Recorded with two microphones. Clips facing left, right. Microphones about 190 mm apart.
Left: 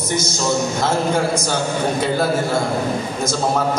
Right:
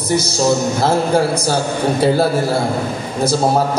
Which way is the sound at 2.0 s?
35° right (ahead or behind).